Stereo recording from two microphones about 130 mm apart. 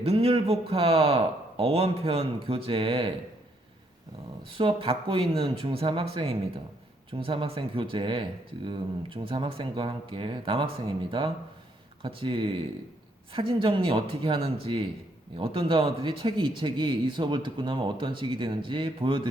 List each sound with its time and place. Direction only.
0.0 s a man's voice: 50° right (ahead or behind)
4.5 s a man's voice: 40° right (ahead or behind)